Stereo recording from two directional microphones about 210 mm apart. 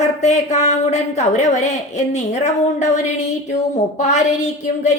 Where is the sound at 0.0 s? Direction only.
30° left (ahead or behind).